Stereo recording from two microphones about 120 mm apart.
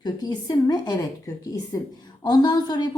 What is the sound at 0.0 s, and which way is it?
Speech, 35° left (ahead or behind).